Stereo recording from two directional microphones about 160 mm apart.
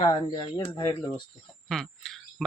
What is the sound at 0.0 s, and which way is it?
Speech, 30° left (ahead or behind).